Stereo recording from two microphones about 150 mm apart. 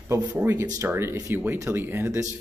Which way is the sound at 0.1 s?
15° right (ahead or behind).